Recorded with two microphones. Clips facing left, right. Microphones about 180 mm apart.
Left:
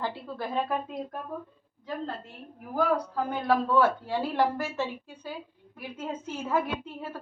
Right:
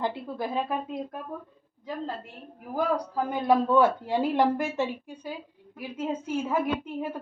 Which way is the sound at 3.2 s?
15° right (ahead or behind).